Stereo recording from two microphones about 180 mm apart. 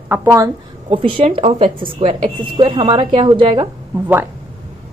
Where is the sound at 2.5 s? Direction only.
25° right (ahead or behind).